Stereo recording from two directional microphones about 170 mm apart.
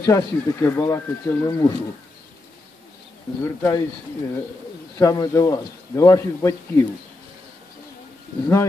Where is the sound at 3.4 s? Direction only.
15° left (ahead or behind).